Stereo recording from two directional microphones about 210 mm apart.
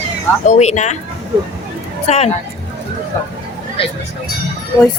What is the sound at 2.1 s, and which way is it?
Speech, 30° left (ahead or behind).